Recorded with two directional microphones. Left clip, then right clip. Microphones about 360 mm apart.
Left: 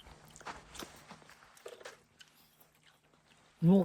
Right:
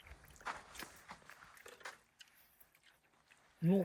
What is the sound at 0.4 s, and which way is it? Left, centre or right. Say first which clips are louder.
Walk: right 1 dB; left.